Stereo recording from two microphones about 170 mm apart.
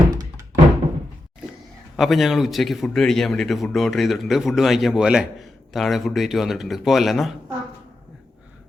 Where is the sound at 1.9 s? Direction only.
Centre (ahead or behind).